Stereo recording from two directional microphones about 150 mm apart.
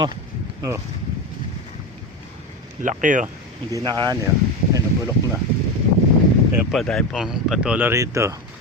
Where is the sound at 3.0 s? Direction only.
60° right (ahead or behind).